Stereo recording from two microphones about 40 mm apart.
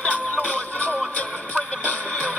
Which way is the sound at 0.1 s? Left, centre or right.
Left.